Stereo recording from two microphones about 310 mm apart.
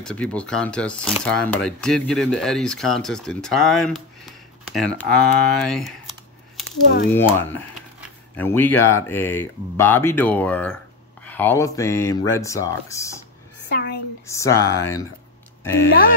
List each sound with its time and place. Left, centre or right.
0.0 s speech: centre
7.2 s speech: centre
13.7 s a sound: left
14.2 s speech: centre